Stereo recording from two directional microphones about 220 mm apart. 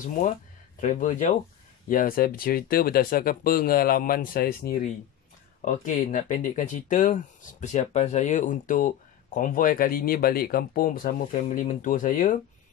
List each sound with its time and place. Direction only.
0.7 s speech: 35° left (ahead or behind)